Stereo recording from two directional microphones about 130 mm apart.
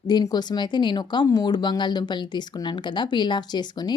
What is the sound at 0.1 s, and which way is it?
Speech, 30° left (ahead or behind).